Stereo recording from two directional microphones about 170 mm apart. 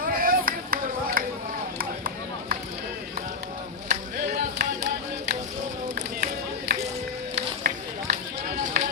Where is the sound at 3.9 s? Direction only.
60° right (ahead or behind).